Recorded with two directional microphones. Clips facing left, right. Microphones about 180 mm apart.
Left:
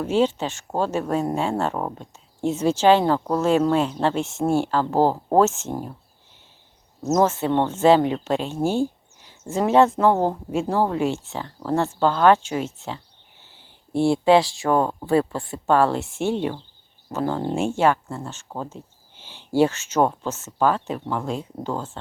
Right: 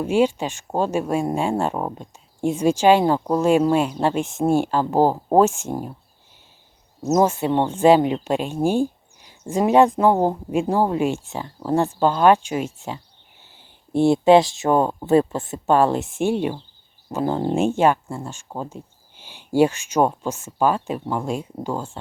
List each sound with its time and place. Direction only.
0.0 s speech: 10° right (ahead or behind)
7.1 s speech: 15° right (ahead or behind)